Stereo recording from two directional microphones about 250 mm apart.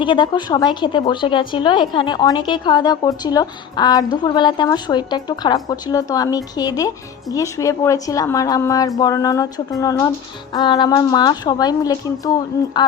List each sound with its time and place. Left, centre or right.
0.0 s a woman's voice: centre